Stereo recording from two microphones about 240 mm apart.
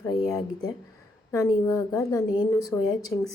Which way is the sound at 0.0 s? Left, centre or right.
Centre.